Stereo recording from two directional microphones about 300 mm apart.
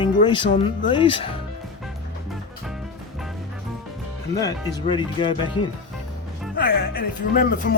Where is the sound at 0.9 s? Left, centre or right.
Centre.